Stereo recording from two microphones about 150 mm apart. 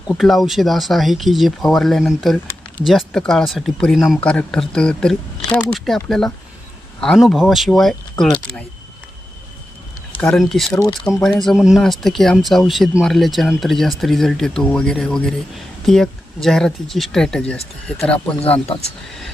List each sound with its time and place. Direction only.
0.1 s speech: centre (ahead or behind)
10.2 s speech: 5° left (ahead or behind)